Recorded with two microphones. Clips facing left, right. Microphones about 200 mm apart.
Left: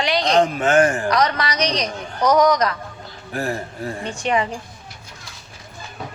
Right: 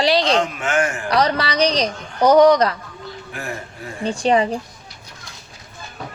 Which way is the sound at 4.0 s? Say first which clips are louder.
Right 5 dB; 35° right (ahead or behind).